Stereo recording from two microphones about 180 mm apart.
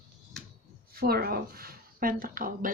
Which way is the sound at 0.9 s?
60° right (ahead or behind).